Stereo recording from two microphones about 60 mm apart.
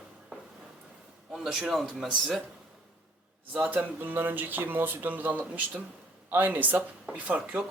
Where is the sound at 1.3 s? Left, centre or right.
Centre.